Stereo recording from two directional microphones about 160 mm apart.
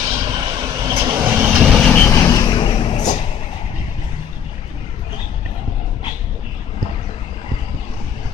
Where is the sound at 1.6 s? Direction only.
5° left (ahead or behind).